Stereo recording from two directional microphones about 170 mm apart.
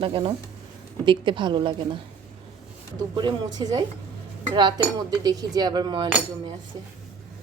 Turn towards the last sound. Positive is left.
turn(degrees=-25)  # may be behind; listen again after turning